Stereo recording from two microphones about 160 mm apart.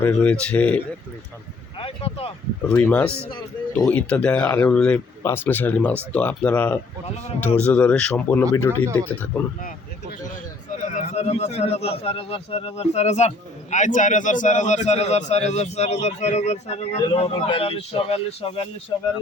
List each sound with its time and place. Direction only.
0.0 s speech: 10° left (ahead or behind)
1.8 s a man's voice: 35° left (ahead or behind)
2.6 s speech: 10° left (ahead or behind)
3.2 s a man's voice: 30° left (ahead or behind)
3.8 s speech: 5° left (ahead or behind)
10.8 s a man's voice: 50° left (ahead or behind)